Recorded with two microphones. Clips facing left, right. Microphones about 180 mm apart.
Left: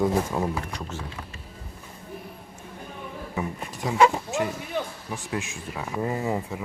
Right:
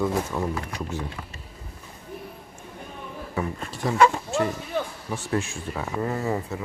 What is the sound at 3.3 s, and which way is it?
Speech, 15° left (ahead or behind).